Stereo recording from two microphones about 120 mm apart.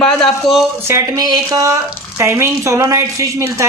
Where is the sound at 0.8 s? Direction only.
25° right (ahead or behind).